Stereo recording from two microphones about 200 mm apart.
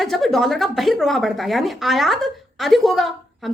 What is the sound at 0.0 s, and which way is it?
Speech, centre (ahead or behind).